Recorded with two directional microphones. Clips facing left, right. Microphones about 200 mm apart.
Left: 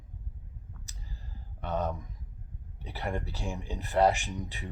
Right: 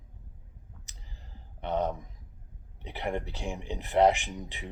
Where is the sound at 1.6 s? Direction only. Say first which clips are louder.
Right 2 dB; 20° right (ahead or behind).